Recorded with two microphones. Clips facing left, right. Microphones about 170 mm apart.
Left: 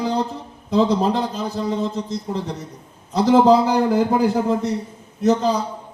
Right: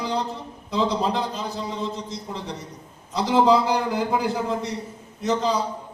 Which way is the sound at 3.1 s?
45° left (ahead or behind).